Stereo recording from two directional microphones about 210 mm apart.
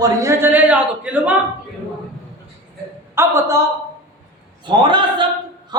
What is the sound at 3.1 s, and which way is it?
Speech, 15° right (ahead or behind).